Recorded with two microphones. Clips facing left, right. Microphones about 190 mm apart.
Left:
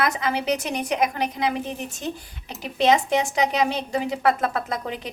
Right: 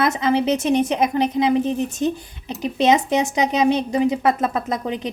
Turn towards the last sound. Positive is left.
turn(degrees=-20)  # may be behind; listen again after turning